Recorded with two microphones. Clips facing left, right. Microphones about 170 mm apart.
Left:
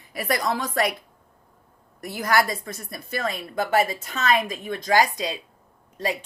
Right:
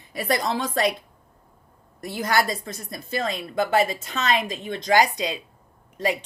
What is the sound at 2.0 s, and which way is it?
A woman's voice, 25° right (ahead or behind).